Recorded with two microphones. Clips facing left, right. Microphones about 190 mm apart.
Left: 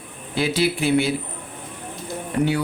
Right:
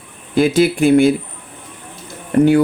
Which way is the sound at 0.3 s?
50° right (ahead or behind).